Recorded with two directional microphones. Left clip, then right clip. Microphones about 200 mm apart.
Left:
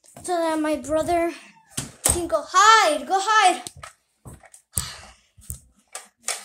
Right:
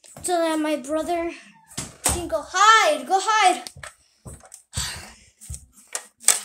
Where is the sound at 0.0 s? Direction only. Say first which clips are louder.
Right 2 dB; 5° right (ahead or behind).